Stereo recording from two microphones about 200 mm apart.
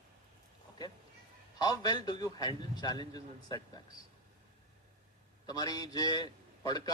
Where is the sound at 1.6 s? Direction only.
20° left (ahead or behind).